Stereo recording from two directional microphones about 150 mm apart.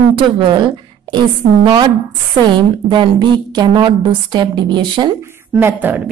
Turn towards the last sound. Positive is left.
turn(degrees=-10)  # may be behind; listen again after turning